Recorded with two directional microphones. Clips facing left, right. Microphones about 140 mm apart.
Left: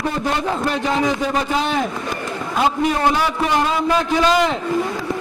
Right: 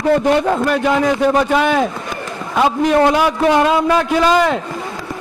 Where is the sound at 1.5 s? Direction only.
55° right (ahead or behind).